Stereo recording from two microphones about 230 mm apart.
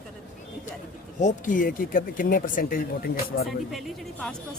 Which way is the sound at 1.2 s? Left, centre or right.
Left.